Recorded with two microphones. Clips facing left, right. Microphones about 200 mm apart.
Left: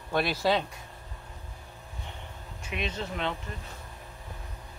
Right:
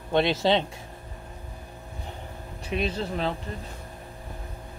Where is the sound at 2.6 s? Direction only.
35° right (ahead or behind).